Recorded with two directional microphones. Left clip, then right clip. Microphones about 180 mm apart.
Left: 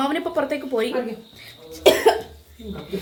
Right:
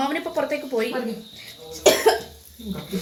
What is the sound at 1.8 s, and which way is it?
Cough, centre (ahead or behind).